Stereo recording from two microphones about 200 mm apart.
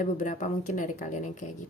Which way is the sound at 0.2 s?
40° left (ahead or behind).